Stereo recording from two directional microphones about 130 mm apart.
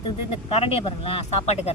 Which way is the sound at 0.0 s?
45° left (ahead or behind).